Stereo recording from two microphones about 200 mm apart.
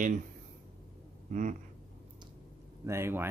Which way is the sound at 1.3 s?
40° right (ahead or behind).